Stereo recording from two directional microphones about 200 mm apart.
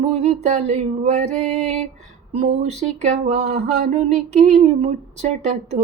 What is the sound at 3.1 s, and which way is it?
Female singing, 35° right (ahead or behind).